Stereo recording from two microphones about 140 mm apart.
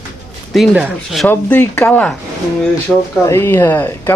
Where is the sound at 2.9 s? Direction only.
Centre (ahead or behind).